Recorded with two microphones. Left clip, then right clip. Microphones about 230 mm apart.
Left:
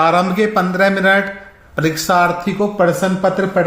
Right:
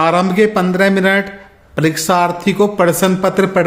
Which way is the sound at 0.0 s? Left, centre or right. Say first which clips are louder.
Right 1 dB; right.